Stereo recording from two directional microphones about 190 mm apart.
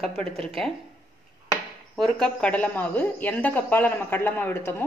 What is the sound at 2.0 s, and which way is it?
A woman's voice, centre (ahead or behind).